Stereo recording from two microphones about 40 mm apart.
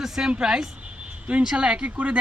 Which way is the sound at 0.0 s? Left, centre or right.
Centre.